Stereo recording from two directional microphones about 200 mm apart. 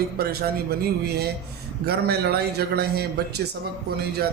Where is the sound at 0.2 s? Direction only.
50° right (ahead or behind).